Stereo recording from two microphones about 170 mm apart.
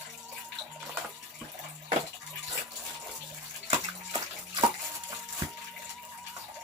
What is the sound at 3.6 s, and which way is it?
Bathtub, 25° right (ahead or behind).